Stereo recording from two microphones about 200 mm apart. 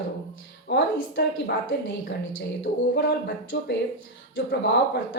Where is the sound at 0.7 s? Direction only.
55° left (ahead or behind).